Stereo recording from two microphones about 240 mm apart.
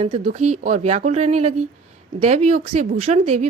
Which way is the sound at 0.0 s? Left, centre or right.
Right.